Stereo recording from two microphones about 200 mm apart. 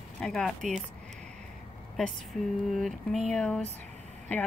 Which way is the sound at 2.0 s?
Centre (ahead or behind).